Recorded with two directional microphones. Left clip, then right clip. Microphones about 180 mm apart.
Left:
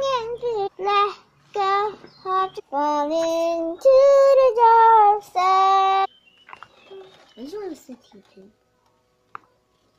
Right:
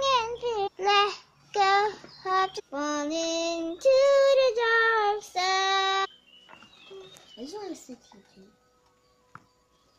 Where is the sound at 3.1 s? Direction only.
35° right (ahead or behind).